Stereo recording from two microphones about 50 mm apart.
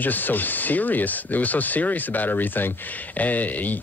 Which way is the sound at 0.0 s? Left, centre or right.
Left.